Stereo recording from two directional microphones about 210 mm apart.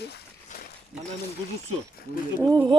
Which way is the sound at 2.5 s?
15° right (ahead or behind).